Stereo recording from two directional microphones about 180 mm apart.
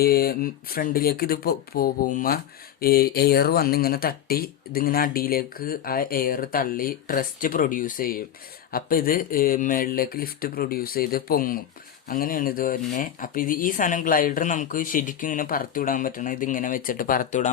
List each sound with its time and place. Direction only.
0.0 s speech: 60° left (ahead or behind)